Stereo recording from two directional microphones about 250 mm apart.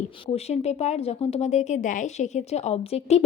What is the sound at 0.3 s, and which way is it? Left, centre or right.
A woman's voice, left.